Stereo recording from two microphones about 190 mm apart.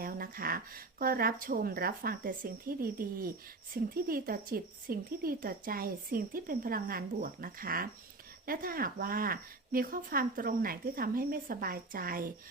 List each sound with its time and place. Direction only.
0.0 s speech: 50° right (ahead or behind)